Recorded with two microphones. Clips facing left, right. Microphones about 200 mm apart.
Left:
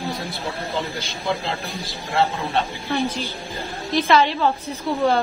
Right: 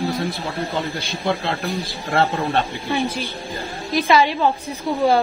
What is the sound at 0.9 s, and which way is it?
Speech, 55° right (ahead or behind).